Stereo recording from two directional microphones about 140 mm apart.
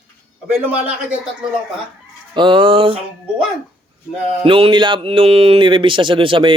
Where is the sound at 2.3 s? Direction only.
35° right (ahead or behind).